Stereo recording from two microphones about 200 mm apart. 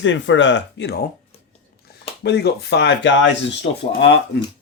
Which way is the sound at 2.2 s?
55° left (ahead or behind).